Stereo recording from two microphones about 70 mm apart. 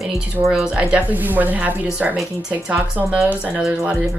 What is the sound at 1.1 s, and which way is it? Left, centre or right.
Speech, right.